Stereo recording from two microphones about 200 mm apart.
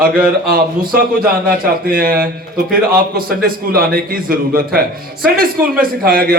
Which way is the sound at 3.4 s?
50° right (ahead or behind).